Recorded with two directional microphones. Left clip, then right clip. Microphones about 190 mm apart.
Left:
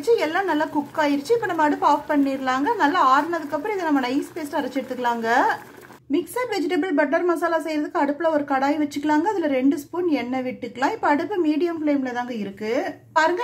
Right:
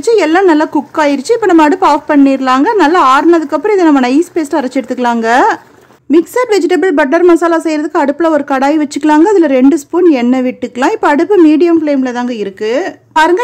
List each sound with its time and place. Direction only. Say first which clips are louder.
0.0 s speech: right 12 dB; 40° right (ahead or behind)